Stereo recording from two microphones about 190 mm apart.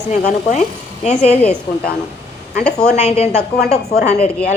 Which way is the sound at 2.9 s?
30° left (ahead or behind).